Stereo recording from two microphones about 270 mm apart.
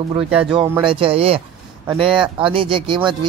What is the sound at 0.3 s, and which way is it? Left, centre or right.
Speech, centre.